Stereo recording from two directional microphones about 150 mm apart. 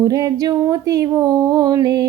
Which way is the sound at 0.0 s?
25° right (ahead or behind).